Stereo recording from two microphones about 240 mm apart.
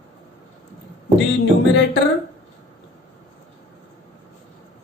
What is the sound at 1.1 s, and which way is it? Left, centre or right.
Music, left.